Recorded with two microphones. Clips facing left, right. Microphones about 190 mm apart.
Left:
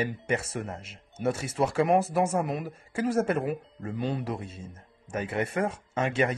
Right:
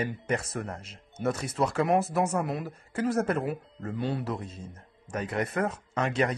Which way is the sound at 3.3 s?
20° left (ahead or behind).